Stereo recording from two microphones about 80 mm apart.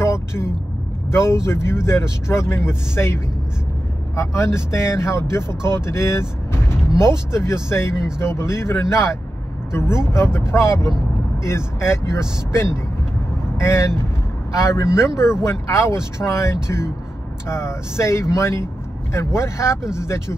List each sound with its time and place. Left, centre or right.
0.0 s vehicle: left
1.4 s speech: left
4.2 s speech: left